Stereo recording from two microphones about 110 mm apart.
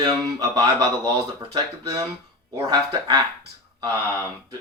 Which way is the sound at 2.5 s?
40° right (ahead or behind).